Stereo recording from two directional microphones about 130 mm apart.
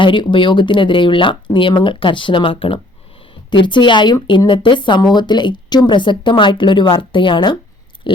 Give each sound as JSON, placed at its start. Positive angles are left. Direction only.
{"t": 0.0, "sound": "speech", "side_deg": 40}
{"t": 8.1, "sound": "chewing", "side_deg": 40}